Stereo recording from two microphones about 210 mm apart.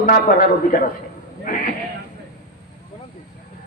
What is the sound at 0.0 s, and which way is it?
Speech, 40° left (ahead or behind).